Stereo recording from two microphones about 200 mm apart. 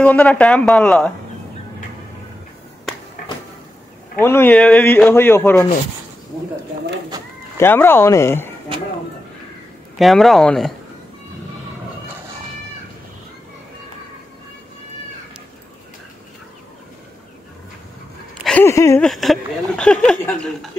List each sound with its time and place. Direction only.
0.0 s a man's voice: 5° left (ahead or behind)
4.2 s a man's voice: 10° left (ahead or behind)
7.1 s speech: 20° right (ahead or behind)
7.5 s a man's voice: 10° left (ahead or behind)
9.9 s speech: centre (ahead or behind)
18.4 s a sound: 5° left (ahead or behind)
18.7 s a man's voice: 15° left (ahead or behind)
19.0 s speech: centre (ahead or behind)